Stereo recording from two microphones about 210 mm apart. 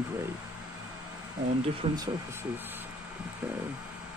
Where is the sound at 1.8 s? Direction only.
25° right (ahead or behind).